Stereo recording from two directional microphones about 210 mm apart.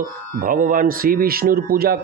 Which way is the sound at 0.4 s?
40° right (ahead or behind).